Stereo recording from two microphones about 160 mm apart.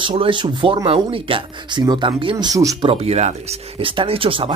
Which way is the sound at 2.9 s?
40° right (ahead or behind).